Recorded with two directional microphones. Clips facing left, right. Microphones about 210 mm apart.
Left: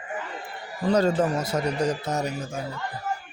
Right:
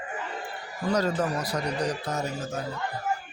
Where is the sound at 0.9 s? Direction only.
30° left (ahead or behind).